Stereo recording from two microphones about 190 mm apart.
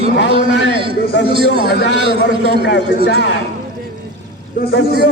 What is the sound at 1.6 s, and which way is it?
Speech, 60° left (ahead or behind).